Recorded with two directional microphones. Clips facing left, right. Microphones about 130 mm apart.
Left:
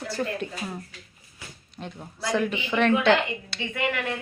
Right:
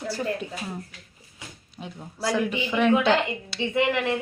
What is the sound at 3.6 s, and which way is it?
Speech, 25° right (ahead or behind).